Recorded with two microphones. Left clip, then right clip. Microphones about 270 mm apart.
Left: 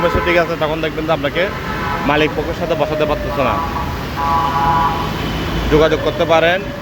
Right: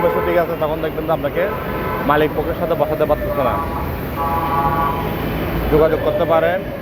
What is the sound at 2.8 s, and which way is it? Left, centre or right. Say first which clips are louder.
Speech: even; left.